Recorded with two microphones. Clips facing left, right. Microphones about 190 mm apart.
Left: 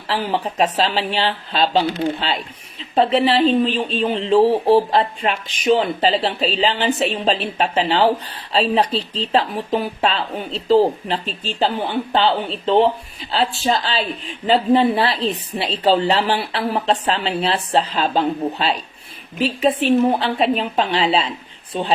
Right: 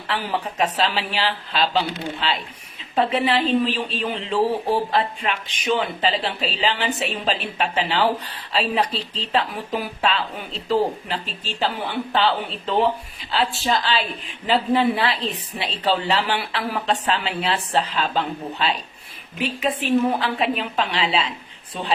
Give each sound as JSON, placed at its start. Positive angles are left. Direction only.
{"t": 0.1, "sound": "a woman's voice", "side_deg": 30}